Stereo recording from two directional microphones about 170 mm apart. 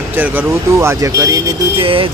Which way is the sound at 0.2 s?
15° right (ahead or behind).